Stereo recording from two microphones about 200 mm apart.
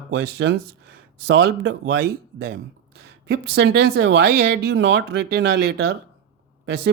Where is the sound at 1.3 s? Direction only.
60° right (ahead or behind).